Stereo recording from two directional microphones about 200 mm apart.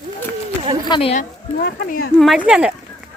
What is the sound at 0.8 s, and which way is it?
Speech, 25° left (ahead or behind).